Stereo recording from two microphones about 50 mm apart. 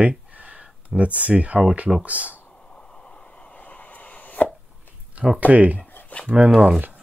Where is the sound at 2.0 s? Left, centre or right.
Right.